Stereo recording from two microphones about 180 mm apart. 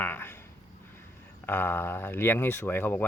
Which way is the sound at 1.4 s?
10° left (ahead or behind).